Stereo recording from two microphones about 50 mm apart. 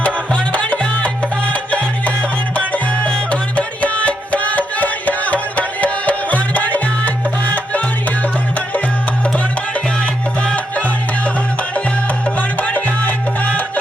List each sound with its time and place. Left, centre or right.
0.3 s music: left
10.5 s music: left
12.2 s music: left